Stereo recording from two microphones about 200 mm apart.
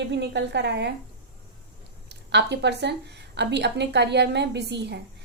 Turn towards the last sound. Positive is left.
turn(degrees=-60)  # may be behind; listen again after turning